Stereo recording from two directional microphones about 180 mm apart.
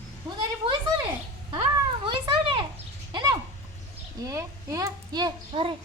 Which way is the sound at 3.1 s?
25° right (ahead or behind).